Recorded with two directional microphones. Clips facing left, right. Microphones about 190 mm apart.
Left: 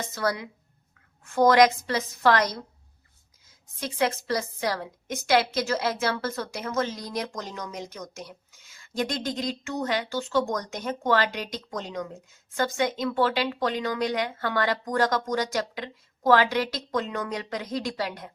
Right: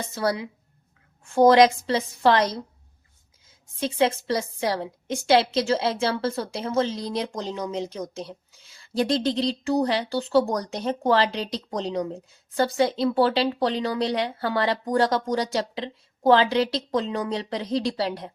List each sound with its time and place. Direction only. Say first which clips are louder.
0.1 s a woman's voice: right 4 dB; 30° right (ahead or behind)
3.8 s a woman's voice: right 4 dB; 25° right (ahead or behind)